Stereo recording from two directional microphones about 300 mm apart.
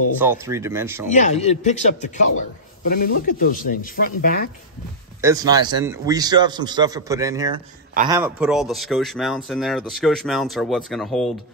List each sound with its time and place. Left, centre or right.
0.2 s a man's voice: centre
1.1 s a man's voice: left
5.2 s a man's voice: centre